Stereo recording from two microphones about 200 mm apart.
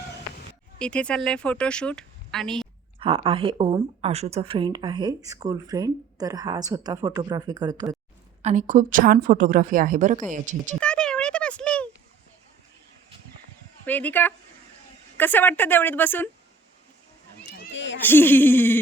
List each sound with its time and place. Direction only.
0.8 s a woman's voice: 5° left (ahead or behind)
3.0 s speech: 25° right (ahead or behind)
8.4 s a woman's voice: 35° right (ahead or behind)
10.8 s a sound: 5° left (ahead or behind)
13.8 s speech: 10° left (ahead or behind)
17.7 s a sound: 65° left (ahead or behind)
18.0 s speech: 10° left (ahead or behind)